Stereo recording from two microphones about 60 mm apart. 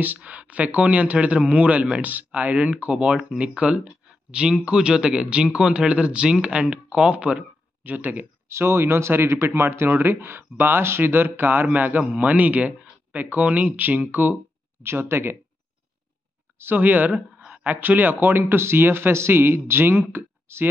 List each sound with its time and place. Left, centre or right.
0.0 s a man's voice: right
8.5 s a man's voice: right
14.8 s speech: right
16.5 s speech: right